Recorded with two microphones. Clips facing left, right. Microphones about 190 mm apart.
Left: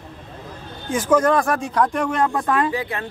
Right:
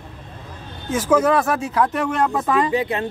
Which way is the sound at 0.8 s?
5° right (ahead or behind).